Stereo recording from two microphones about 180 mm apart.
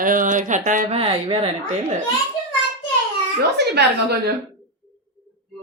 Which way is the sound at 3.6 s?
65° right (ahead or behind).